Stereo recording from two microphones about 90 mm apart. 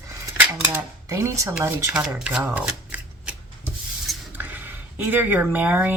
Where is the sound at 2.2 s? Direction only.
15° right (ahead or behind).